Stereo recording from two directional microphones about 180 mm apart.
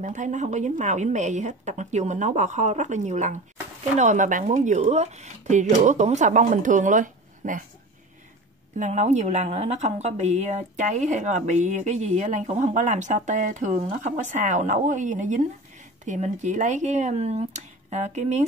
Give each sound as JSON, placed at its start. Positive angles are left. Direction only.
{"t": 0.0, "sound": "a woman's voice", "side_deg": -40}
{"t": 8.7, "sound": "a woman's voice", "side_deg": -40}